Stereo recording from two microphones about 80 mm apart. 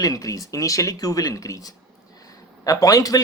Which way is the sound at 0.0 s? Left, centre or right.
Left.